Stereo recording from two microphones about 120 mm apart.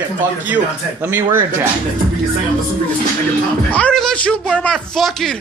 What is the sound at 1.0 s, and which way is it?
Speech, 15° right (ahead or behind).